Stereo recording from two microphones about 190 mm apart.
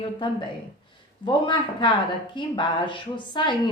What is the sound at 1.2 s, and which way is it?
A woman's voice, 25° left (ahead or behind).